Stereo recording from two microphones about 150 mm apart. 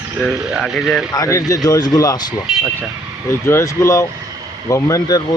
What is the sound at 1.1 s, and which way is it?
Speech, 20° left (ahead or behind).